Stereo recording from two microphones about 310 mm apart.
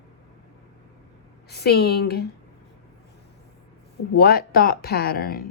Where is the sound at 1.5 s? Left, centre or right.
Left.